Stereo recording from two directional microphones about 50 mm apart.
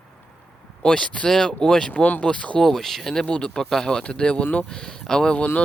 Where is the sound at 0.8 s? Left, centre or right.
Centre.